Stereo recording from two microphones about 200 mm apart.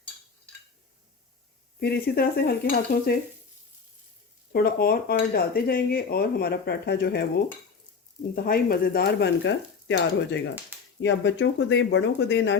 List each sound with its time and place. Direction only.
1.8 s speech: 50° left (ahead or behind)
4.5 s speech: 50° left (ahead or behind)
8.4 s speech: 50° left (ahead or behind)